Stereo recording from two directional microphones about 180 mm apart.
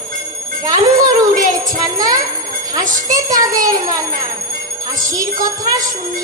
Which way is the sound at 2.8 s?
45° right (ahead or behind).